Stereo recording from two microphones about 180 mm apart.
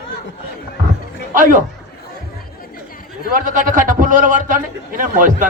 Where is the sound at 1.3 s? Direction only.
50° right (ahead or behind).